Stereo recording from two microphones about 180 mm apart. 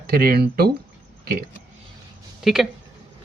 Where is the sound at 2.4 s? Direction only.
Centre (ahead or behind).